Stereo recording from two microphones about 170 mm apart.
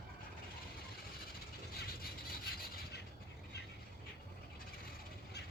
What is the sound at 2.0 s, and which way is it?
Rub, 60° left (ahead or behind).